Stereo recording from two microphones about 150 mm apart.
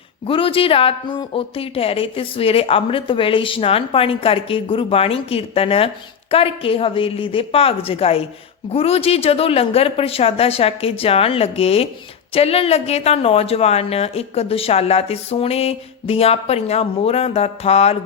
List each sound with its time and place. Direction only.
0.3 s a woman's voice: 35° left (ahead or behind)